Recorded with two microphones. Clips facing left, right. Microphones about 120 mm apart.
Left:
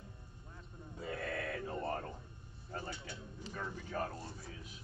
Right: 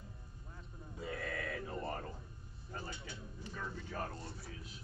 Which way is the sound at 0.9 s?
30° left (ahead or behind).